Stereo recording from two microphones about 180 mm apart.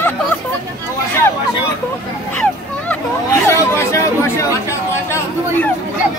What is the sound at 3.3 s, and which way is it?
Chatter, 15° left (ahead or behind).